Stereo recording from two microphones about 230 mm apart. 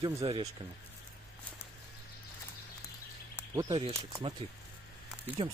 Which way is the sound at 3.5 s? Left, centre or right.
Centre.